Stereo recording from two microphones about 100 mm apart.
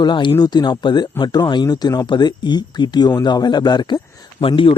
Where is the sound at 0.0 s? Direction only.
50° left (ahead or behind).